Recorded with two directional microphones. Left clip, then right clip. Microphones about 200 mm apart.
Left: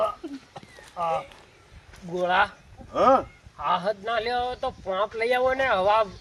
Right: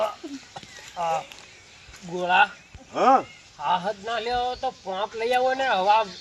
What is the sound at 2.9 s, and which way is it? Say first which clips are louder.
Speech: right 1 dB; 20° left (ahead or behind).